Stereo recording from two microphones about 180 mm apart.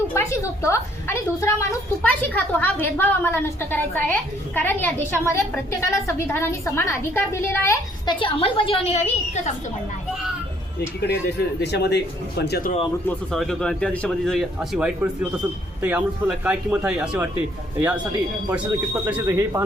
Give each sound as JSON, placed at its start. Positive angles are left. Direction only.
{"t": 0.1, "sound": "a woman's voice", "side_deg": 15}
{"t": 8.0, "sound": "a woman's voice", "side_deg": 25}
{"t": 10.8, "sound": "speech", "side_deg": 65}
{"t": 13.1, "sound": "speech", "side_deg": 0}